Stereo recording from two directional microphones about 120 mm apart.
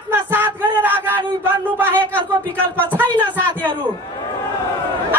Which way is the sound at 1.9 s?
15° left (ahead or behind).